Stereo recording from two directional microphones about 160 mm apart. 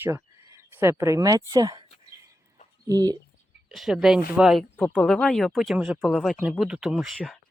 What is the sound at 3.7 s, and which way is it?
Speech, centre (ahead or behind).